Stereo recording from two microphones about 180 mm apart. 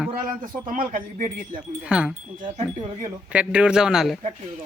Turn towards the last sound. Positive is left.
turn(degrees=0)  # may be behind; listen again after turning